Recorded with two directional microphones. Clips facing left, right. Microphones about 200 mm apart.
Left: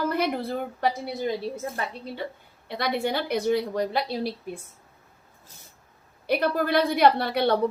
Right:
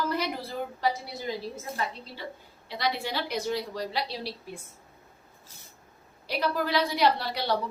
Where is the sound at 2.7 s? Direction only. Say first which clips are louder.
Left 4 dB; 55° left (ahead or behind).